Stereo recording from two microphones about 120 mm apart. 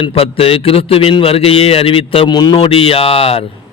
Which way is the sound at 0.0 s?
55° left (ahead or behind).